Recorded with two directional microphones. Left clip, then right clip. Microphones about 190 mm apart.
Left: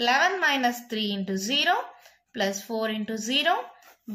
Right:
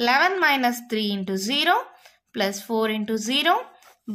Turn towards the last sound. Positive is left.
turn(degrees=-40)  # may be behind; listen again after turning